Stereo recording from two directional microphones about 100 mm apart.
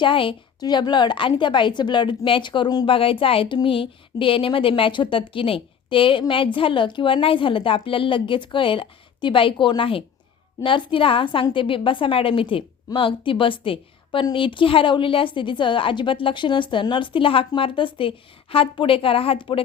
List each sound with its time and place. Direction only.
0.0 s a woman's voice: 60° left (ahead or behind)
0.6 s a woman's voice: 45° left (ahead or behind)
2.9 s a woman's voice: 65° left (ahead or behind)